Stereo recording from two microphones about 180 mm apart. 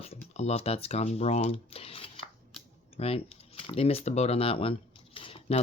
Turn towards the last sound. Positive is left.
turn(degrees=35)  # may be behind; listen again after turning